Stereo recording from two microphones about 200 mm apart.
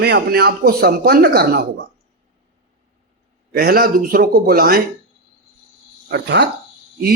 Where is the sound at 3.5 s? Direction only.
50° right (ahead or behind).